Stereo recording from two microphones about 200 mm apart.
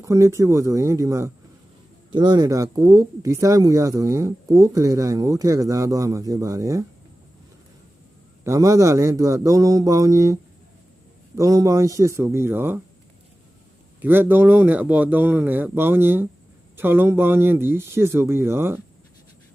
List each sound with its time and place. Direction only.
0.0 s speech: 15° right (ahead or behind)
8.4 s speech: 15° right (ahead or behind)
14.0 s speech: 10° right (ahead or behind)